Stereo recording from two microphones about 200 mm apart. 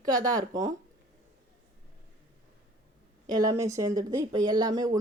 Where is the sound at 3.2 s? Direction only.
20° right (ahead or behind).